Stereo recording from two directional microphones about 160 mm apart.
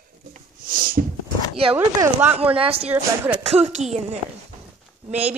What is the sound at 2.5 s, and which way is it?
Speech, 35° right (ahead or behind).